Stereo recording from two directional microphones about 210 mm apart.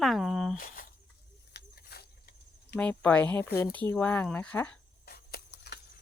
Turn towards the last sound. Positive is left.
turn(degrees=50)  # may be behind; listen again after turning